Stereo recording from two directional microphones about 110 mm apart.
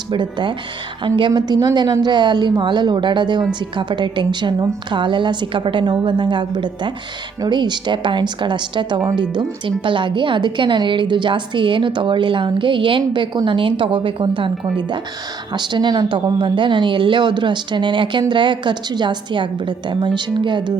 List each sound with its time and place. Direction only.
0.1 s speech: 45° right (ahead or behind)